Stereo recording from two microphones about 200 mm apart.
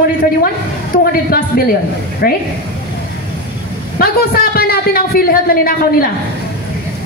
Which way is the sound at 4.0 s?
50° left (ahead or behind).